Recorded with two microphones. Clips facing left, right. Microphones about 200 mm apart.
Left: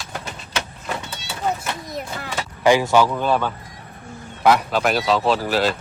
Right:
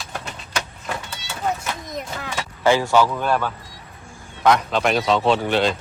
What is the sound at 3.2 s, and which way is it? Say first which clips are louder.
Speech: left 1 dB; 5° right (ahead or behind).